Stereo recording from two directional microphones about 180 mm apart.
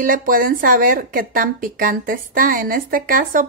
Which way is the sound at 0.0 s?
50° right (ahead or behind).